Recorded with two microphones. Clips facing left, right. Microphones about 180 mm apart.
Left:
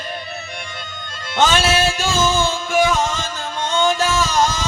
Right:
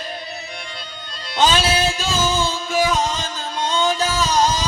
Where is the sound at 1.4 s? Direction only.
50° left (ahead or behind).